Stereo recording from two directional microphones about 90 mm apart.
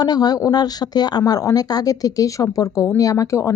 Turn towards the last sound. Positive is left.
turn(degrees=35)  # may be behind; listen again after turning